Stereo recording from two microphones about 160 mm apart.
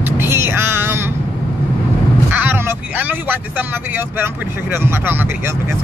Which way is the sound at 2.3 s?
10° right (ahead or behind).